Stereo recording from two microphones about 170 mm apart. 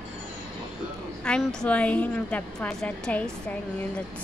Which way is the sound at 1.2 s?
5° left (ahead or behind).